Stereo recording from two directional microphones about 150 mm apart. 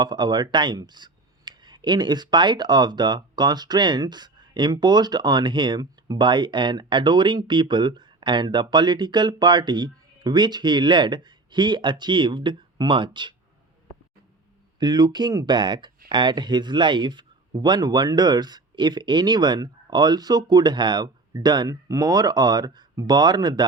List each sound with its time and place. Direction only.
0.0 s speech: 30° right (ahead or behind)
14.8 s speech: 25° right (ahead or behind)